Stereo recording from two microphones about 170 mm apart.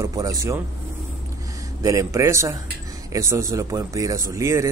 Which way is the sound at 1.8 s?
20° right (ahead or behind).